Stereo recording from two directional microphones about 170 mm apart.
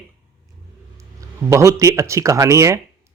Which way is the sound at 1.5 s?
15° right (ahead or behind).